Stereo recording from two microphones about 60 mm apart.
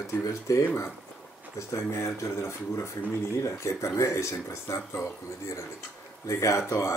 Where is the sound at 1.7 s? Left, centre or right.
Left.